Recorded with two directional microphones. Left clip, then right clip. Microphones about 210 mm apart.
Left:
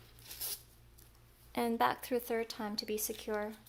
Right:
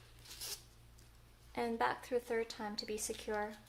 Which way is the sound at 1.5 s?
40° left (ahead or behind).